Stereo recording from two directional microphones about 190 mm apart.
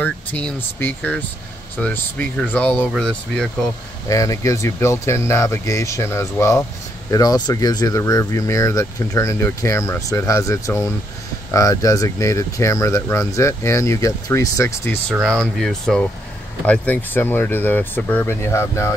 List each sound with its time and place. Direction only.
0.0 s speech: 5° left (ahead or behind)
4.1 s speech: 15° left (ahead or behind)
15.1 s speech: centre (ahead or behind)